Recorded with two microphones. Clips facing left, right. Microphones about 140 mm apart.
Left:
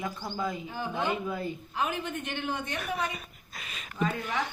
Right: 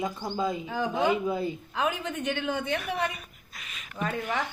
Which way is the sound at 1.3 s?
20° right (ahead or behind).